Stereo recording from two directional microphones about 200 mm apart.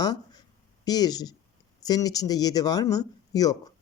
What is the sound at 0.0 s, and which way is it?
Speech, 20° left (ahead or behind).